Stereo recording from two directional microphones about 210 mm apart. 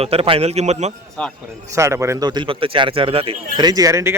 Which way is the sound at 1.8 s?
15° right (ahead or behind).